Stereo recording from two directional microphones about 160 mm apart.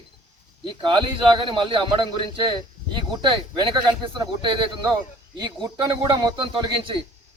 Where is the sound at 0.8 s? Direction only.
30° right (ahead or behind).